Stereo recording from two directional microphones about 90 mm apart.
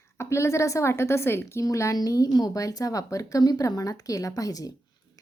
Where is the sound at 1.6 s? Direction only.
40° left (ahead or behind).